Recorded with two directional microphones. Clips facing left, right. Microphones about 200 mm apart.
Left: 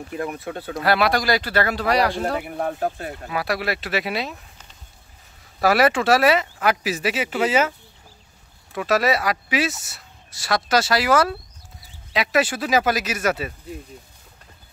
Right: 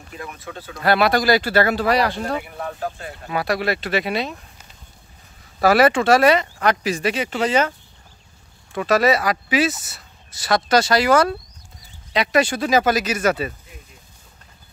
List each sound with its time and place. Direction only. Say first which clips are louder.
0.1 s speech: left 5 dB; 55° left (ahead or behind)
0.8 s speech: right 3 dB; centre (ahead or behind)
2.4 s speech: left 4 dB; 45° left (ahead or behind)
3.3 s speech: right 3 dB; centre (ahead or behind)
5.6 s speech: right 3 dB; centre (ahead or behind)
8.7 s speech: right 3 dB; centre (ahead or behind)